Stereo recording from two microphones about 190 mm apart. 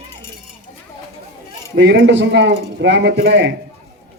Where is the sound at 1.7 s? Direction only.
70° right (ahead or behind).